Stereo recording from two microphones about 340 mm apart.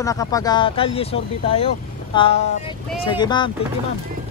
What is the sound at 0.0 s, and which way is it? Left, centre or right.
Speech, centre.